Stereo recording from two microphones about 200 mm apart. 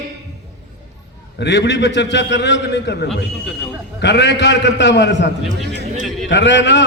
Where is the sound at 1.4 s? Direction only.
60° left (ahead or behind).